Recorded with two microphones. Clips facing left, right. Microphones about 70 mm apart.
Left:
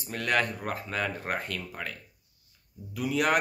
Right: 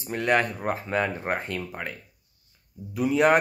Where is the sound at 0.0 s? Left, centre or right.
Right.